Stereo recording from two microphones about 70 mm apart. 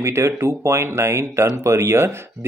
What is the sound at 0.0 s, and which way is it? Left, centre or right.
Speech, right.